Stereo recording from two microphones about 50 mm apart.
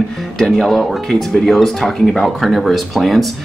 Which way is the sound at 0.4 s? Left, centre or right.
Centre.